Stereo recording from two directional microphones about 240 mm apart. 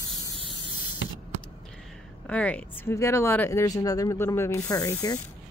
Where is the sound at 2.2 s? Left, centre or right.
Centre.